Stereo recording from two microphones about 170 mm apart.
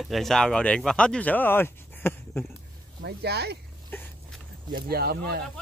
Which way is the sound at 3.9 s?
15° left (ahead or behind).